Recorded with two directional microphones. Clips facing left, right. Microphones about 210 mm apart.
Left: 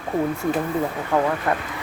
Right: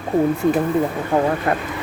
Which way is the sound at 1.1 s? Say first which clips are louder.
Right 2 dB; 25° right (ahead or behind).